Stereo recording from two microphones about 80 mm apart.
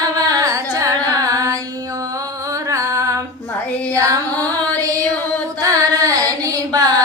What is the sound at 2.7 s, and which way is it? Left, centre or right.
Music, right.